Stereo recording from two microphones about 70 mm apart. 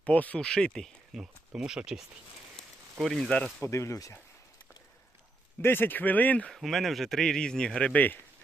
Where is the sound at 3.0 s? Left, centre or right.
Centre.